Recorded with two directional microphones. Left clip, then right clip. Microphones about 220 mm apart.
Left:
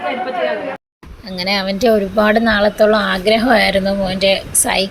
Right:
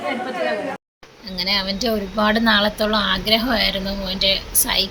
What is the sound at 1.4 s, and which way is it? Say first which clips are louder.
Speech: left 4 dB; 20° left (ahead or behind).